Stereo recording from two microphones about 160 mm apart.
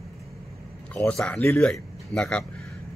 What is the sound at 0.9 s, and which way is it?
Speech, 5° left (ahead or behind).